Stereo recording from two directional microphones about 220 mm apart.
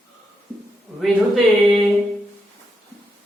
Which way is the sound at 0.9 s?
Centre (ahead or behind).